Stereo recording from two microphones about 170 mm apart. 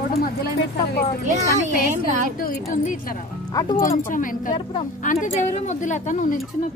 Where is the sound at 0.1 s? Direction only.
60° left (ahead or behind).